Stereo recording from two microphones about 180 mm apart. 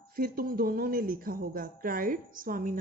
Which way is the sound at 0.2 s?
55° right (ahead or behind).